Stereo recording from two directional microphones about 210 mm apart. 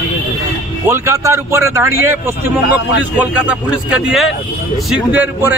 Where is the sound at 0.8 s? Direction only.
10° right (ahead or behind).